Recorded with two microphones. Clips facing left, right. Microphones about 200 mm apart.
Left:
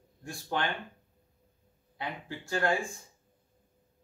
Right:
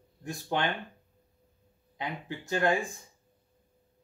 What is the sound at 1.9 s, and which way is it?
Speech, 20° right (ahead or behind).